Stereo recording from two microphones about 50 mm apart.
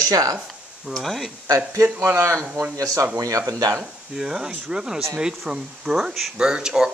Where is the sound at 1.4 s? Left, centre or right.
Right.